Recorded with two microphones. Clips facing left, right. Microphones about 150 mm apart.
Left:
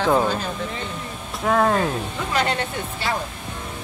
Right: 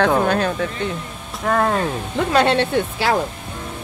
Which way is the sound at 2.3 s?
70° right (ahead or behind).